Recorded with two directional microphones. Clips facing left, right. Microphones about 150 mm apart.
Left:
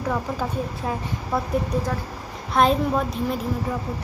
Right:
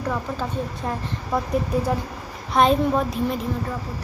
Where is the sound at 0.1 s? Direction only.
5° left (ahead or behind).